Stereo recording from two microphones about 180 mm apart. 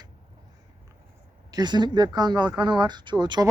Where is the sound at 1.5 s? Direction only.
25° right (ahead or behind).